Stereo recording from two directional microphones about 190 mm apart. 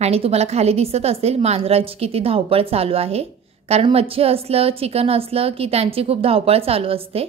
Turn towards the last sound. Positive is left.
turn(degrees=-30)  # may be behind; listen again after turning